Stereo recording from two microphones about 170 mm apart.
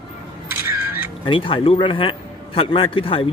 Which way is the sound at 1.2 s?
30° left (ahead or behind).